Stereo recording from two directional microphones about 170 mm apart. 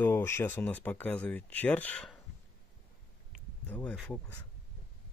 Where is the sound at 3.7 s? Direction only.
10° left (ahead or behind).